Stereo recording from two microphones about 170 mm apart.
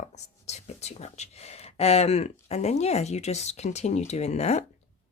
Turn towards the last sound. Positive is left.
turn(degrees=40)  # may be behind; listen again after turning